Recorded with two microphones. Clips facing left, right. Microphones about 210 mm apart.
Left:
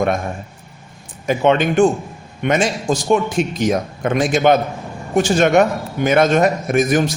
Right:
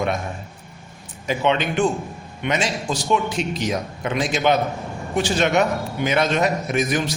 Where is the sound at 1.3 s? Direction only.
50° left (ahead or behind).